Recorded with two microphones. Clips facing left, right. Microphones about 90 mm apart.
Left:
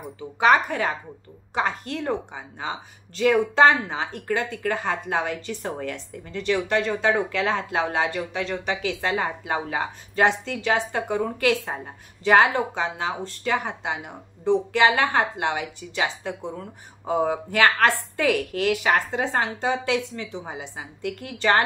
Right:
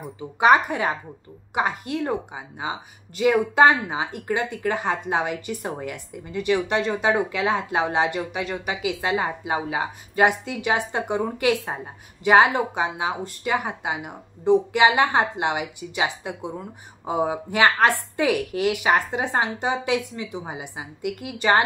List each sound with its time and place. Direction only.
0.2 s a woman's voice: 15° right (ahead or behind)